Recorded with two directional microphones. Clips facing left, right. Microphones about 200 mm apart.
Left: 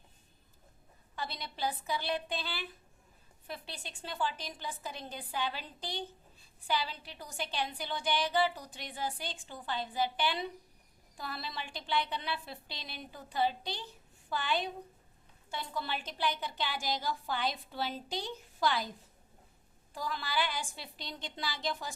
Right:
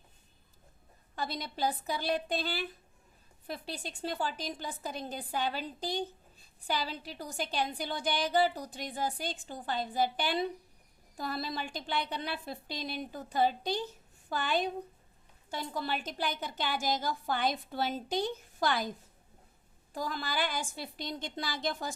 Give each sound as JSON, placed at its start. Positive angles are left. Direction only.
{"t": 1.1, "sound": "a woman's voice", "side_deg": -40}
{"t": 19.9, "sound": "a woman's voice", "side_deg": -45}